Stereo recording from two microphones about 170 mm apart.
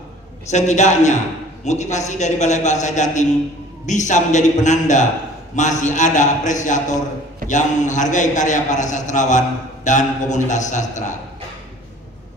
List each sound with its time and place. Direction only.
0.5 s a man's voice: 45° left (ahead or behind)